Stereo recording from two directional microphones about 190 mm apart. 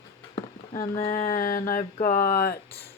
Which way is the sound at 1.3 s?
45° left (ahead or behind).